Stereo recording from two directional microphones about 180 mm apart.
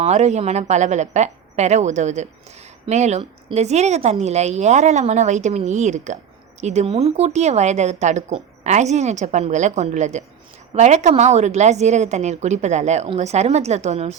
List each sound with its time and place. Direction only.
0.0 s a woman's voice: 40° right (ahead or behind)